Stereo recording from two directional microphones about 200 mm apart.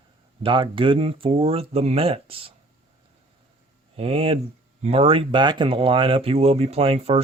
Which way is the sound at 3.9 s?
30° right (ahead or behind).